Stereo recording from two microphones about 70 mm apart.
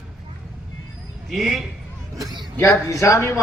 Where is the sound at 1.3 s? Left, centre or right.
Centre.